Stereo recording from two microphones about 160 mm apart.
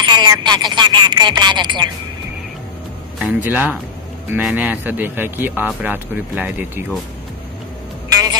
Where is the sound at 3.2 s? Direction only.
10° right (ahead or behind).